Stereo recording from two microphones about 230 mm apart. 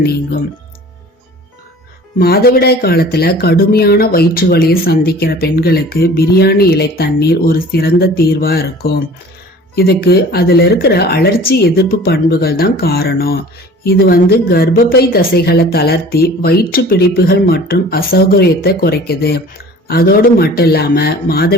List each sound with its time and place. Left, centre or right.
2.1 s speech: left